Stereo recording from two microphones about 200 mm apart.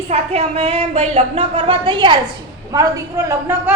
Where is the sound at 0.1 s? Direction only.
30° right (ahead or behind); by 3.8 s 15° right (ahead or behind).